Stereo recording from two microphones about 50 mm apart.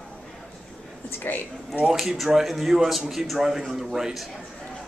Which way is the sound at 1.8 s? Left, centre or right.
Centre.